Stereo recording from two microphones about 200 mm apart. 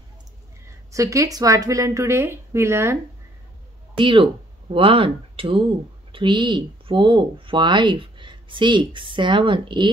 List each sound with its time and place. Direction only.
0.9 s a woman's voice: 15° right (ahead or behind)
4.0 s speech: 25° right (ahead or behind)